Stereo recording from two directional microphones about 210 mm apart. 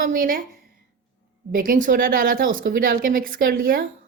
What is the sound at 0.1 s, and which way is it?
Speech, 40° right (ahead or behind).